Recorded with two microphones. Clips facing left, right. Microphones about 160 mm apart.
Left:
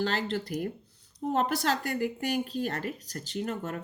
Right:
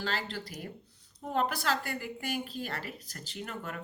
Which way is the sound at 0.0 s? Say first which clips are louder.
Left 6 dB; 45° left (ahead or behind).